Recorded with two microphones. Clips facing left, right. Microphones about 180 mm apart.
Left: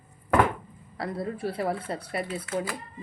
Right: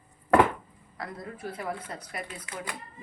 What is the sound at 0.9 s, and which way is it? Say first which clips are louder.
Speech: left 7 dB; 30° left (ahead or behind).